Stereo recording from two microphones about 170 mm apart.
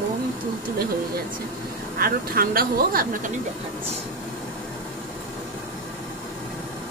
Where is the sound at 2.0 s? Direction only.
60° right (ahead or behind).